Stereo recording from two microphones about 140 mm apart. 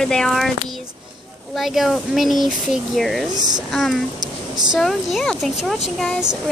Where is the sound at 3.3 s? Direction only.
30° right (ahead or behind).